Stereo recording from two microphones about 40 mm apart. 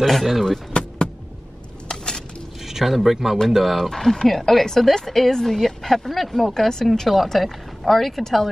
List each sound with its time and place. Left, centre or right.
0.0 s speech: centre
1.9 s a sound: centre
2.7 s speech: centre
3.9 s speech: centre
7.1 s speech: centre